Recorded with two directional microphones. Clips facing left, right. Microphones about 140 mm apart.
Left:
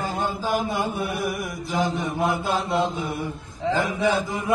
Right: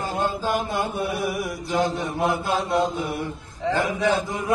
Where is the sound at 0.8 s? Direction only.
Centre (ahead or behind).